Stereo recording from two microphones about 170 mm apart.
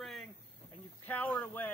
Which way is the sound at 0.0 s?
Centre (ahead or behind).